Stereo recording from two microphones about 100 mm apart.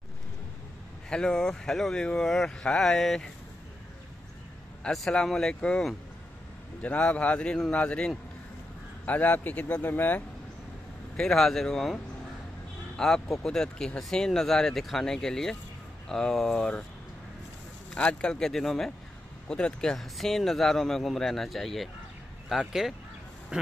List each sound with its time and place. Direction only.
1.1 s speech: 5° left (ahead or behind)
4.8 s speech: 5° left (ahead or behind)
11.1 s speech: 5° left (ahead or behind)
17.9 s speech: 10° left (ahead or behind); by 23.7 s 10° right (ahead or behind)